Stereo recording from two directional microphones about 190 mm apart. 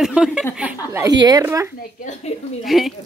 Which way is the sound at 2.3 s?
35° left (ahead or behind).